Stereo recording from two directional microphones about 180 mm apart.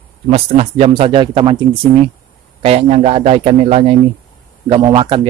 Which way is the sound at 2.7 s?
35° right (ahead or behind).